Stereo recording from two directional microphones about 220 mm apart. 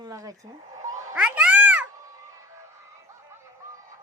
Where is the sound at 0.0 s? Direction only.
15° right (ahead or behind).